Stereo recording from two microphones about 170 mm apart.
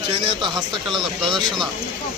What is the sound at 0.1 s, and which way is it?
Speech, 25° right (ahead or behind).